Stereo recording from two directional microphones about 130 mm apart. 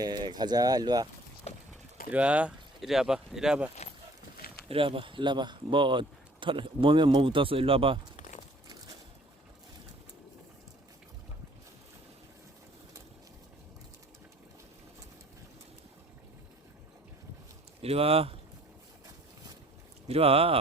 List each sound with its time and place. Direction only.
0.0 s speech: 35° right (ahead or behind)
1.5 s a sound: 55° left (ahead or behind)
2.1 s speech: 10° right (ahead or behind)
4.7 s speech: 45° right (ahead or behind)
8.1 s a sound: 65° left (ahead or behind)
17.8 s speech: 50° right (ahead or behind)
20.1 s speech: 50° right (ahead or behind)